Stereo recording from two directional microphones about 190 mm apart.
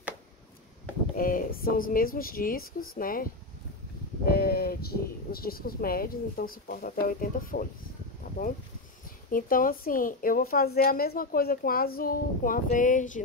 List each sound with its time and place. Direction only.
1.1 s a woman's voice: 50° left (ahead or behind)
4.3 s a woman's voice: 55° left (ahead or behind)
9.3 s a woman's voice: 45° left (ahead or behind)